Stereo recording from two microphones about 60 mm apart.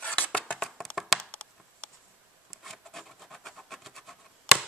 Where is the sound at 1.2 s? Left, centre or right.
Centre.